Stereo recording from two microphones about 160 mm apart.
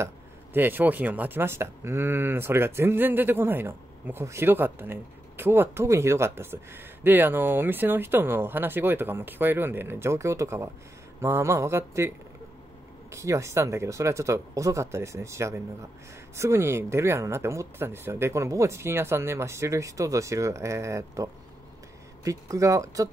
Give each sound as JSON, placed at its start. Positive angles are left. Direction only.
{"t": 0.0, "sound": "speech", "side_deg": -15}
{"t": 13.1, "sound": "speech", "side_deg": -20}